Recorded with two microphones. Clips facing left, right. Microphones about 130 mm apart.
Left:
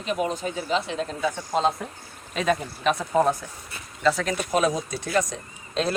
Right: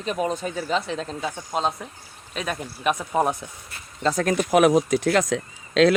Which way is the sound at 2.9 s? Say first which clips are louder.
Left 1 dB; 15° right (ahead or behind).